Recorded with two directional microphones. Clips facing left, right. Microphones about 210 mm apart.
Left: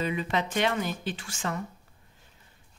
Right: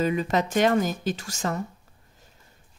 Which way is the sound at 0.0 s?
45° right (ahead or behind).